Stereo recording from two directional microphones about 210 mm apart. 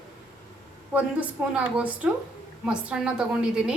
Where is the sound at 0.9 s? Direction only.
5° right (ahead or behind).